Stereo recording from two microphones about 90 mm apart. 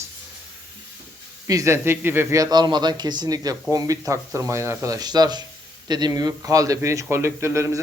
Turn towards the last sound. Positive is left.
turn(degrees=-35)  # may be behind; listen again after turning